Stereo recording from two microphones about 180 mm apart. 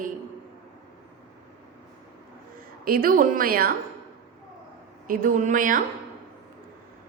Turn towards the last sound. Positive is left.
turn(degrees=-45)  # may be behind; listen again after turning